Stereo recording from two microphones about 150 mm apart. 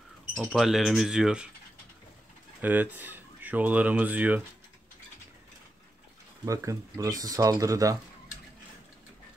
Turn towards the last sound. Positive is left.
turn(degrees=-20)  # may be behind; listen again after turning